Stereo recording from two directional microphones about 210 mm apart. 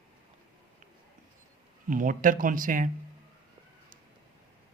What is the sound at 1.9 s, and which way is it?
Speech, 40° right (ahead or behind).